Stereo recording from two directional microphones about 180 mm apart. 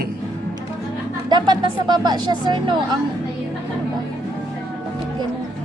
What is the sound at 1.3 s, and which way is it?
Speech, 25° right (ahead or behind).